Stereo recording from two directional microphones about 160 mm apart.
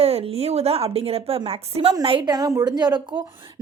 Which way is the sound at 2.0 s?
30° right (ahead or behind).